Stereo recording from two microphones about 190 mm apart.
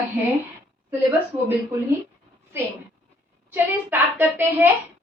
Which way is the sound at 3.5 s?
10° right (ahead or behind).